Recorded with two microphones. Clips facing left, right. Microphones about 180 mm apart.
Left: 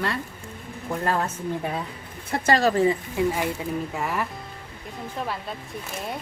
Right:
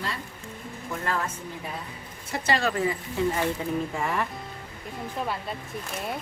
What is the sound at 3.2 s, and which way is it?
Speech, 15° left (ahead or behind).